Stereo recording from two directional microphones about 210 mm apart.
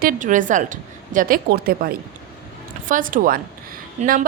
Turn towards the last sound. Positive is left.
turn(degrees=-35)  # may be behind; listen again after turning